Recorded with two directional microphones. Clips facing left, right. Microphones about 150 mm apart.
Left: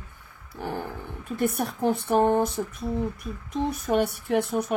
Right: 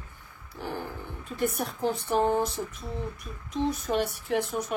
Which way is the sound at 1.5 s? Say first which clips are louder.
Left 4 dB; 55° left (ahead or behind).